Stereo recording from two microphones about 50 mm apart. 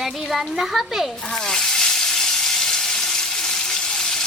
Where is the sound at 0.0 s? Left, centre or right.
Centre.